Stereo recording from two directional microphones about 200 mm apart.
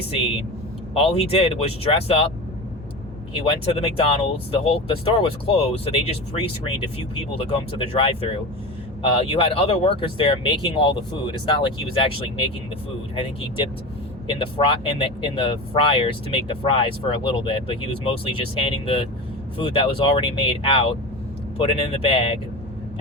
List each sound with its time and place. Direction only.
0.9 s speech: 30° left (ahead or behind)
3.3 s speech: 25° left (ahead or behind)
14.3 s speech: 25° left (ahead or behind)